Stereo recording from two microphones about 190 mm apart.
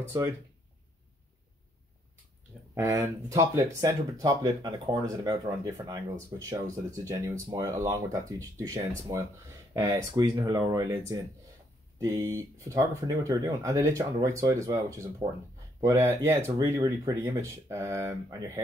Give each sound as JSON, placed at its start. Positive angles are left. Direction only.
{"t": 2.7, "sound": "speech", "side_deg": -15}